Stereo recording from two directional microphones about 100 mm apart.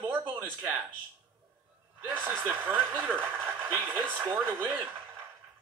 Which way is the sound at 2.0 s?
20° right (ahead or behind).